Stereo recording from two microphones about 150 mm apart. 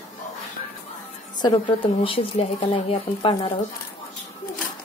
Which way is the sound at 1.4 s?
35° left (ahead or behind).